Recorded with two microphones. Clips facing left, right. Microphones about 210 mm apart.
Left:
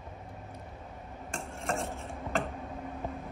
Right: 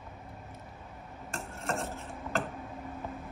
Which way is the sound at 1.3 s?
Centre (ahead or behind).